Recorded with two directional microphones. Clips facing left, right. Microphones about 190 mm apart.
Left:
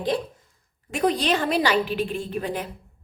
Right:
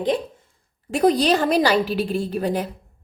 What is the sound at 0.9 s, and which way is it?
A woman's voice, 40° right (ahead or behind).